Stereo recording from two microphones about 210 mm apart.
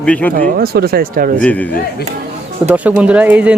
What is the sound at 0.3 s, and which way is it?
Speech, 45° right (ahead or behind).